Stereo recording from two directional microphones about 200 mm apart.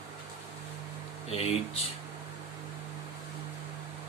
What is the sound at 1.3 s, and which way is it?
Speech, 30° left (ahead or behind).